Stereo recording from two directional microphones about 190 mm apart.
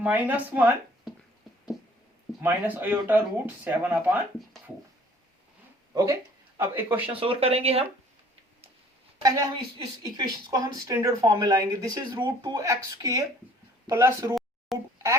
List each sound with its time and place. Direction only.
0.0 s speech: 10° right (ahead or behind)
2.4 s speech: 10° right (ahead or behind)
5.9 s speech: 15° right (ahead or behind)
7.2 s speech: 30° right (ahead or behind)
9.2 s a woman's voice: 20° right (ahead or behind)
14.7 s speech: centre (ahead or behind)